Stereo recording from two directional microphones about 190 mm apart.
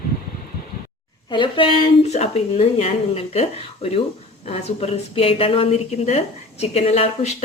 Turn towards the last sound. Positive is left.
turn(degrees=35)  # may be behind; listen again after turning